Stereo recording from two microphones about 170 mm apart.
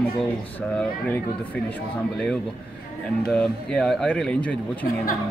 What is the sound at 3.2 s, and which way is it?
A man's voice, 5° left (ahead or behind).